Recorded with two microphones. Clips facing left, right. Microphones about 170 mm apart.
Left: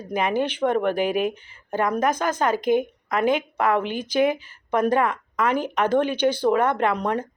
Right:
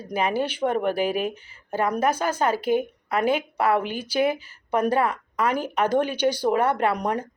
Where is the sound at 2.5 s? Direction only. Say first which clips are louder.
Left 4 dB; 10° right (ahead or behind).